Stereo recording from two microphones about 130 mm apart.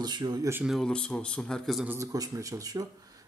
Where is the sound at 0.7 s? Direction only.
5° left (ahead or behind).